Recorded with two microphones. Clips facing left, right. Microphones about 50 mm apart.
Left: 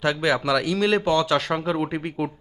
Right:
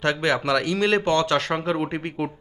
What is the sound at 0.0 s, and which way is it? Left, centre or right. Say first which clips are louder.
A man's voice: even; centre.